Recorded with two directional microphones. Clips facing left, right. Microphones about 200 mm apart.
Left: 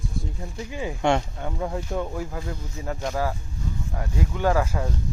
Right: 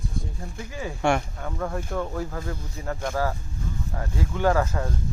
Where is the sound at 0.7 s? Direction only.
20° left (ahead or behind).